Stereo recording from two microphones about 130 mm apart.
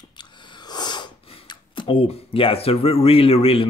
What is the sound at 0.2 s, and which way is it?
Speech, 35° left (ahead or behind).